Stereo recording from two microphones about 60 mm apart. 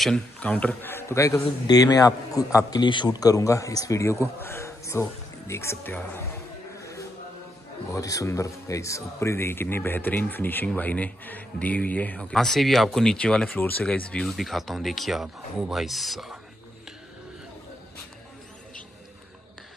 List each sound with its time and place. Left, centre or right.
0.4 s speech: left
0.8 s a man's voice: left
5.9 s speech: left
6.8 s music: left
7.9 s a man's voice: left
12.3 s speech: centre
13.5 s speech: left
13.8 s speech: centre
14.2 s speech: centre